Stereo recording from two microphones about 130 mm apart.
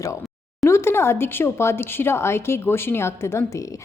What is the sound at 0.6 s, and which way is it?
A woman's voice, 20° left (ahead or behind).